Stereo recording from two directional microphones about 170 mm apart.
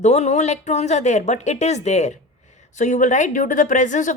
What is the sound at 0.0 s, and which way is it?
A woman's voice, 40° left (ahead or behind).